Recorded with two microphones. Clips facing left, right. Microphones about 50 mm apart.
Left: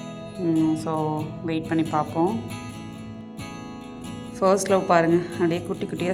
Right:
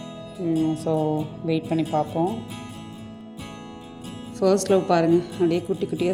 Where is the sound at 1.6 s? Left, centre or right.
Left.